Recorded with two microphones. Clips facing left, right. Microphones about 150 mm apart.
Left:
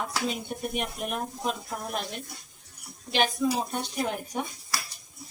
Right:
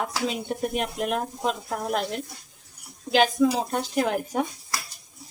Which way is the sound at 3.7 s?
90° right.